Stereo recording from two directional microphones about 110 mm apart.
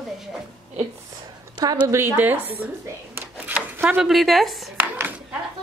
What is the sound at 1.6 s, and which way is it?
Speech, 35° right (ahead or behind).